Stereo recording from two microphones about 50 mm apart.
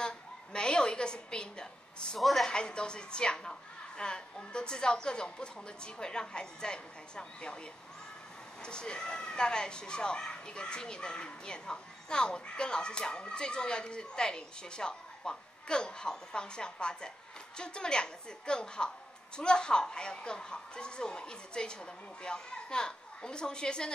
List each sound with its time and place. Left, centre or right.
0.0 s a sound: centre
2.1 s a woman's voice: centre
2.4 s speech: centre
8.6 s speech: centre